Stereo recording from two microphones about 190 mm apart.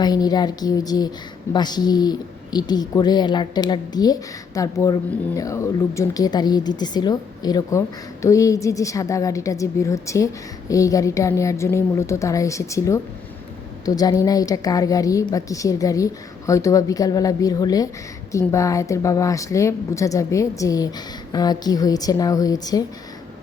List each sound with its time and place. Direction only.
0.0 s a woman's voice: 20° left (ahead or behind)